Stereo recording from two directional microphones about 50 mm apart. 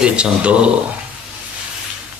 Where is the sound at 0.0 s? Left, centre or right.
Right.